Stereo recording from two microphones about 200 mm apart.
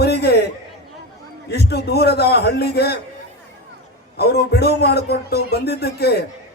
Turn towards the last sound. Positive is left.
turn(degrees=55)  # may be behind; listen again after turning